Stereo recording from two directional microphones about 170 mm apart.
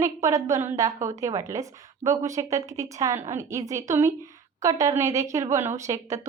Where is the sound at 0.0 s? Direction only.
20° right (ahead or behind).